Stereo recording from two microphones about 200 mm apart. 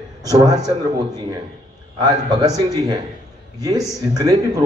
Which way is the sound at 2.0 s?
20° right (ahead or behind).